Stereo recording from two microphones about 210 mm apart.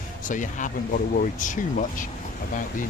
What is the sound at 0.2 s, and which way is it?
Speech, 40° left (ahead or behind).